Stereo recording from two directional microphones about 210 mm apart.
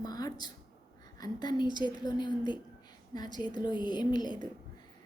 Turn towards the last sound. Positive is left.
turn(degrees=20)  # may be behind; listen again after turning